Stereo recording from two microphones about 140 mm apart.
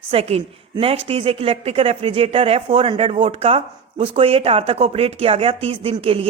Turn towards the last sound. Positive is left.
turn(degrees=-40)  # may be behind; listen again after turning